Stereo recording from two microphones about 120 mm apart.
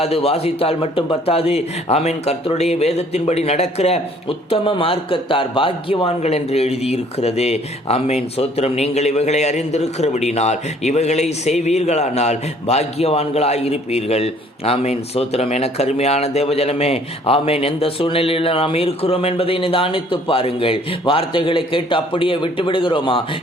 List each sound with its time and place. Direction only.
0.0 s speech: 55° left (ahead or behind)
4.4 s a man's voice: 50° left (ahead or behind)